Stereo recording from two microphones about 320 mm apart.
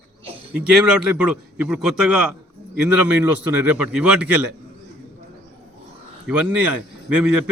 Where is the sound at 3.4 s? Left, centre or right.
Right.